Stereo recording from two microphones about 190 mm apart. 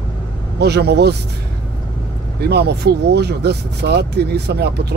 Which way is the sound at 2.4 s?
60° right (ahead or behind).